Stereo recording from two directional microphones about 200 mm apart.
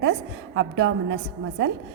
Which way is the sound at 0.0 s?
65° right (ahead or behind).